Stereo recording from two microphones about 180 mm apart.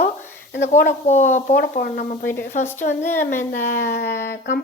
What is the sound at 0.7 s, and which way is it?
Speech, 40° left (ahead or behind).